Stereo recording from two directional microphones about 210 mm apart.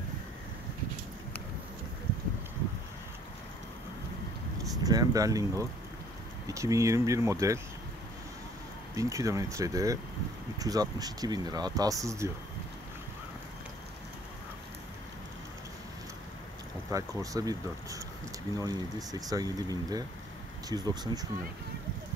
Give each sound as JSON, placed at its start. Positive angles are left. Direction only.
{"t": 4.8, "sound": "speech", "side_deg": -15}
{"t": 8.9, "sound": "speech", "side_deg": -15}
{"t": 16.9, "sound": "speech", "side_deg": -15}